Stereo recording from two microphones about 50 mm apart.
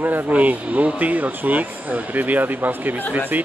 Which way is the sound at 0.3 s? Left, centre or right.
Right.